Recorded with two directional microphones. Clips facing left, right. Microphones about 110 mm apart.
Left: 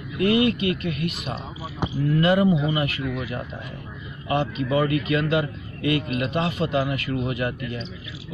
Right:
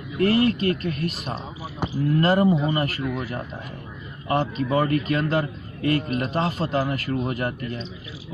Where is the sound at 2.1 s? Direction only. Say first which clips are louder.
Even; 40° right (ahead or behind).